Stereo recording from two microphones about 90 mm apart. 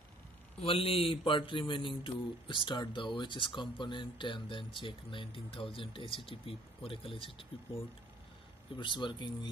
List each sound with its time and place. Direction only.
0.6 s speech: 90° left
8.7 s speech: 60° left (ahead or behind)